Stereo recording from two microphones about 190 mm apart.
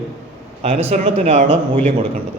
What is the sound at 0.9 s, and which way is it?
Speech, 30° right (ahead or behind).